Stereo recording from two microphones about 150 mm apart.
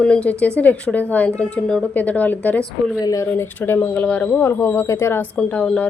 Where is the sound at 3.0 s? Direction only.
25° left (ahead or behind).